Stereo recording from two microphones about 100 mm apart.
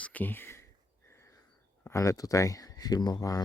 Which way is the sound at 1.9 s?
30° left (ahead or behind).